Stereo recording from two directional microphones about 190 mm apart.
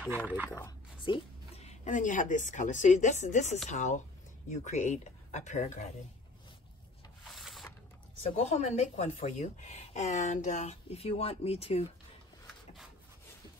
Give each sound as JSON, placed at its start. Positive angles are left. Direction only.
{"t": 0.0, "sound": "speech", "side_deg": -5}
{"t": 0.5, "sound": "speech", "side_deg": 15}
{"t": 1.0, "sound": "a woman's voice", "side_deg": 30}
{"t": 7.3, "sound": "a sound", "side_deg": 0}
{"t": 8.4, "sound": "speech", "side_deg": 35}